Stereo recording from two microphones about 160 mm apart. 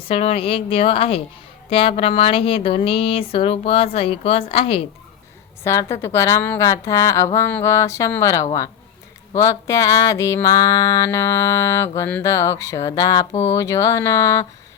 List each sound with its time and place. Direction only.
0.1 s speech: 35° left (ahead or behind)
5.6 s a woman's voice: 15° left (ahead or behind)
6.7 s music: 20° left (ahead or behind)